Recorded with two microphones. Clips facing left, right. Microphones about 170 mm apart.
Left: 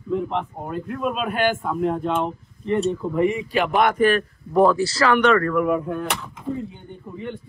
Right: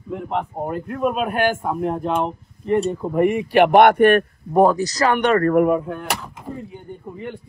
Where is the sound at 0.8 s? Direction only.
40° right (ahead or behind).